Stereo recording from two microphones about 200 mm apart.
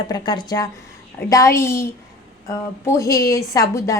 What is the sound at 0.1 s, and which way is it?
A woman's voice, 20° left (ahead or behind).